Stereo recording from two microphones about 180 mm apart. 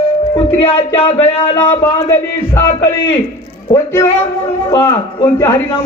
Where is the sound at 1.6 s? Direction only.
15° left (ahead or behind).